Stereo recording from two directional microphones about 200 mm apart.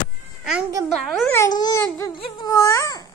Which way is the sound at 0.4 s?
5° right (ahead or behind).